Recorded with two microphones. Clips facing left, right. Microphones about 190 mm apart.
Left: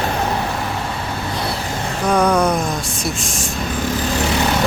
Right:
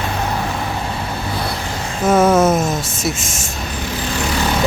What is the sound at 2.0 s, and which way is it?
Speech, 5° right (ahead or behind).